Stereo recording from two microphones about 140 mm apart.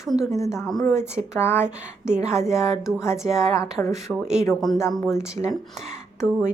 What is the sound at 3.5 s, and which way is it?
Speech, 25° left (ahead or behind).